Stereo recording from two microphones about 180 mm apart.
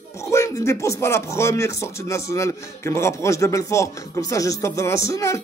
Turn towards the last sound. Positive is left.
turn(degrees=15)  # may be behind; listen again after turning